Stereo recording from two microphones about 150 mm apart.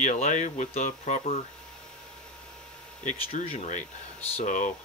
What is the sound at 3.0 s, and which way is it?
Speech, 50° left (ahead or behind).